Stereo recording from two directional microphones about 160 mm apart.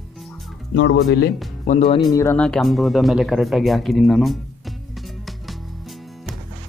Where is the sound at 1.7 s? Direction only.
50° left (ahead or behind).